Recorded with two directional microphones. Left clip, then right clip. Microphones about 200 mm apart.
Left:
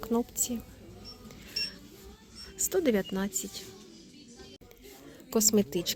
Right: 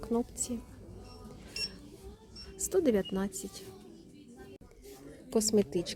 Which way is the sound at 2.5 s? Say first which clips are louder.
Left 1 dB; 5° right (ahead or behind).